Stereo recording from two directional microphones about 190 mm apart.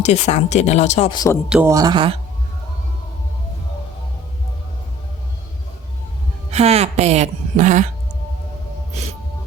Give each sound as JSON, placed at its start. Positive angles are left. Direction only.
{"t": 0.0, "sound": "speech", "side_deg": 35}
{"t": 1.1, "sound": "speech", "side_deg": 20}
{"t": 1.5, "sound": "speech", "side_deg": -5}
{"t": 1.7, "sound": "speech", "side_deg": -20}
{"t": 6.5, "sound": "a woman's voice", "side_deg": -35}